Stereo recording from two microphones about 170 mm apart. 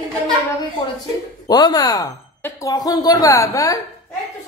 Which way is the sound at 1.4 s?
25° left (ahead or behind).